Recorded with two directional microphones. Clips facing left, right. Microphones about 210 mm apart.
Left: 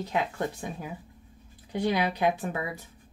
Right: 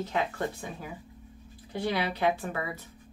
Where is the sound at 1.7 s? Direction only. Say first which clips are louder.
Left 3 dB; 15° left (ahead or behind).